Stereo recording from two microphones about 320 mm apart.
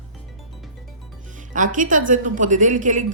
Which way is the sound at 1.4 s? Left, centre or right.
Right.